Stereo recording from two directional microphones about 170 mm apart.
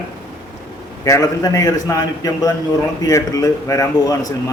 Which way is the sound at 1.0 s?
20° left (ahead or behind).